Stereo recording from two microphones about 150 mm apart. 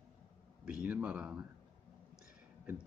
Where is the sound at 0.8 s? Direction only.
10° right (ahead or behind).